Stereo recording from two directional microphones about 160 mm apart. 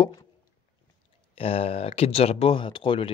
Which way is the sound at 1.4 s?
35° left (ahead or behind).